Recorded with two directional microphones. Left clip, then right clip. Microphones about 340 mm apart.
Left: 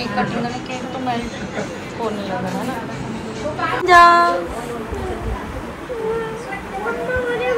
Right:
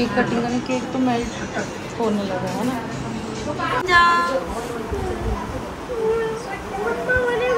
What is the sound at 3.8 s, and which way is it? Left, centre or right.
Speech, centre.